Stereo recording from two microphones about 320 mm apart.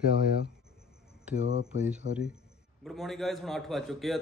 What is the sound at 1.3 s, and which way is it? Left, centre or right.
Speech, right.